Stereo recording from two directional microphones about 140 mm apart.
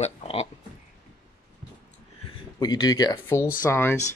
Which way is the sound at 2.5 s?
30° left (ahead or behind).